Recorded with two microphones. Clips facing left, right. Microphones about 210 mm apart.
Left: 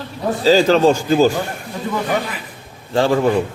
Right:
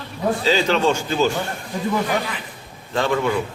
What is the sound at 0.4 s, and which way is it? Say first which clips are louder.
Speech: left 8 dB; 35° left (ahead or behind).